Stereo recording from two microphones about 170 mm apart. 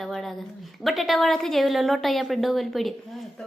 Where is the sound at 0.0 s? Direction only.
Centre (ahead or behind).